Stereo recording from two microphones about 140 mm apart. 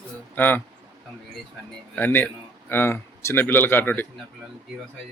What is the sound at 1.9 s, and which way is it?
Speech, 15° left (ahead or behind).